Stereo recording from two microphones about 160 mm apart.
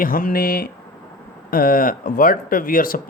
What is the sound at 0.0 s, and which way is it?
Speech, 60° left (ahead or behind).